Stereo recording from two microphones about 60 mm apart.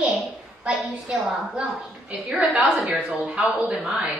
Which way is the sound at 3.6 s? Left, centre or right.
Centre.